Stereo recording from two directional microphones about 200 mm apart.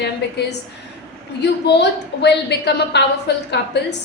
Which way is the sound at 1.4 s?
55° left (ahead or behind).